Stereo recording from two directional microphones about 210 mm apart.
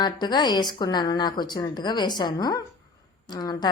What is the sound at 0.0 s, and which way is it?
A woman's voice, 20° left (ahead or behind).